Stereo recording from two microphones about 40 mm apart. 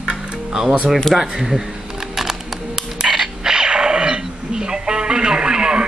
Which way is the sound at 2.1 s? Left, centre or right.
Centre.